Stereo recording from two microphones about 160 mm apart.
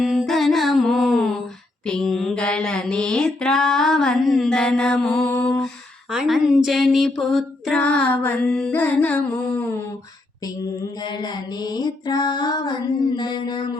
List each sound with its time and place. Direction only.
0.0 s music: centre (ahead or behind)
1.9 s mantra: 5° left (ahead or behind)
5.3 s lullaby: 10° left (ahead or behind)
6.1 s female singing: centre (ahead or behind)
11.0 s music: 25° left (ahead or behind)